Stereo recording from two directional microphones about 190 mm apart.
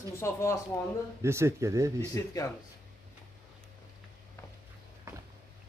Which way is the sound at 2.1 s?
15° left (ahead or behind).